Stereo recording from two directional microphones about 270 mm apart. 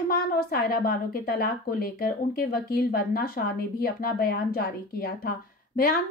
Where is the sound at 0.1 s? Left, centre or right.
Left.